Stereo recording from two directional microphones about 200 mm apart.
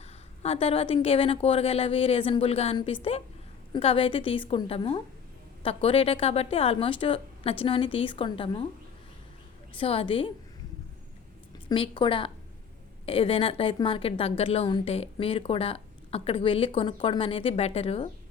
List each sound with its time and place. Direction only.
0.4 s a woman's voice: 30° left (ahead or behind)
9.7 s a woman's voice: 30° left (ahead or behind)
11.7 s a woman's voice: 25° left (ahead or behind)